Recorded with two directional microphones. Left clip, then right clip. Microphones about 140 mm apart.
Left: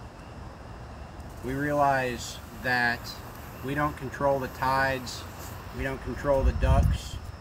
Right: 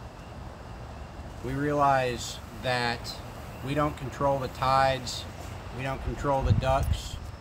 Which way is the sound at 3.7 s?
25° right (ahead or behind).